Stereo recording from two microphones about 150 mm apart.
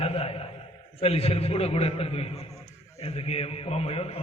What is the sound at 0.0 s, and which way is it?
A man's voice, 40° left (ahead or behind).